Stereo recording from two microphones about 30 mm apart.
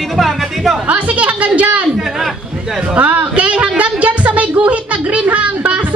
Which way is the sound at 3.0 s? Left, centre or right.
Right.